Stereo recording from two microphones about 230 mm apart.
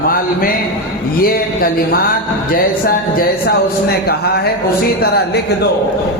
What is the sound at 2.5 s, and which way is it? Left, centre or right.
Speech, left.